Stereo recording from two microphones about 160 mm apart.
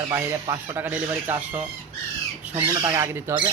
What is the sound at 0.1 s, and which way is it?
Speech, 15° right (ahead or behind).